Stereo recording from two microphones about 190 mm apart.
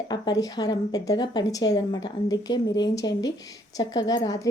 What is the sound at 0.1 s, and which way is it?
Speech, 20° left (ahead or behind).